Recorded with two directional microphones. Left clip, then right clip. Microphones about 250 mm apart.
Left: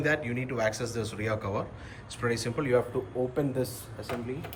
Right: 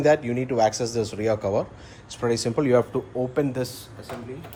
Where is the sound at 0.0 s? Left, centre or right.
Centre.